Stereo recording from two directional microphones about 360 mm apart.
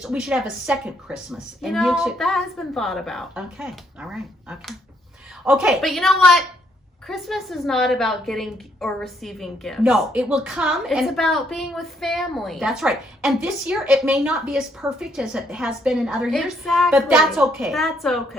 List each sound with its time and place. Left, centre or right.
0.0 s a woman's voice: centre